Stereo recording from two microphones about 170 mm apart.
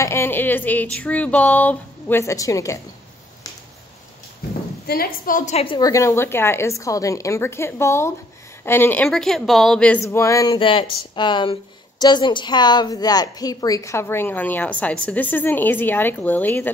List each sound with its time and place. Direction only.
0.0 s a woman's voice: 15° left (ahead or behind)
4.8 s a woman's voice: 60° left (ahead or behind); by 5.8 s 40° left (ahead or behind)
5.8 s a woman's voice: 20° left (ahead or behind); by 9.9 s 5° left (ahead or behind)
10.0 s a sound: 15° left (ahead or behind)
12.0 s a woman's voice: 25° left (ahead or behind); by 16.7 s 10° left (ahead or behind)